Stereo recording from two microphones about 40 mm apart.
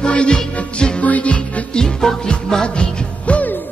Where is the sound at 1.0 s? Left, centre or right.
Left.